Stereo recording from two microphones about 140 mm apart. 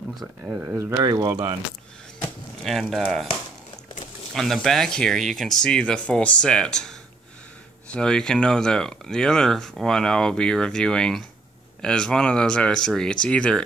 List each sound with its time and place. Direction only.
0.5 s speech: 15° right (ahead or behind)
2.6 s speech: centre (ahead or behind)
4.3 s speech: centre (ahead or behind)